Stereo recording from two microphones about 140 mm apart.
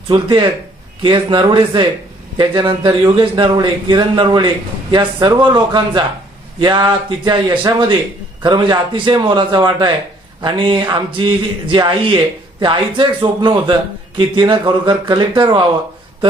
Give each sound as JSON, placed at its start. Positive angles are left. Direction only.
{"t": 0.1, "sound": "a man's voice", "side_deg": -35}